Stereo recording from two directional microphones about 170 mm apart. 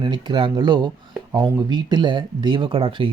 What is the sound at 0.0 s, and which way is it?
Speech, 25° right (ahead or behind).